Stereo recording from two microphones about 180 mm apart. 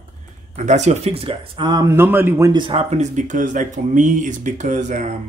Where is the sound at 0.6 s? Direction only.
40° right (ahead or behind); by 2.5 s 10° right (ahead or behind).